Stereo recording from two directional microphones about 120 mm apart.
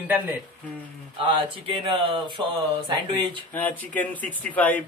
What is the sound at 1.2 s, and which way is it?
Speech, 45° right (ahead or behind).